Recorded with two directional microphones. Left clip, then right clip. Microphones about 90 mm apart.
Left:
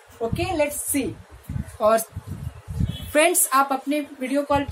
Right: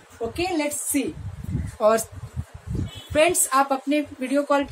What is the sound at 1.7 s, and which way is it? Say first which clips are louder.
Speech: even; 5° right (ahead or behind).